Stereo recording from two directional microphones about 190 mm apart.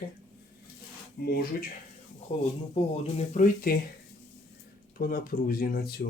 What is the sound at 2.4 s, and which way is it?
Speech, 35° left (ahead or behind).